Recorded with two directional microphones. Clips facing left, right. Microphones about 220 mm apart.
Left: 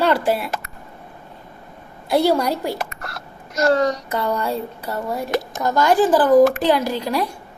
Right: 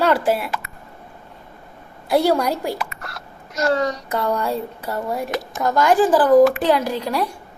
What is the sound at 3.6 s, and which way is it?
Speech, 45° left (ahead or behind).